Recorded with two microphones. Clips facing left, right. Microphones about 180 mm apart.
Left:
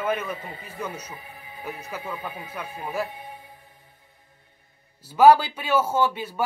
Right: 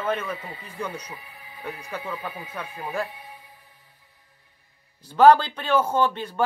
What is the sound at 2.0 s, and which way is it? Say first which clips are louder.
Speech: right 1 dB; 25° left (ahead or behind).